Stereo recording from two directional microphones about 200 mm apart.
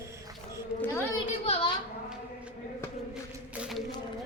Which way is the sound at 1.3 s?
30° left (ahead or behind).